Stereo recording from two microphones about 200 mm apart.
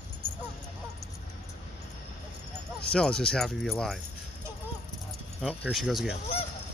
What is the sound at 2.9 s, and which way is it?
Speech, 5° left (ahead or behind).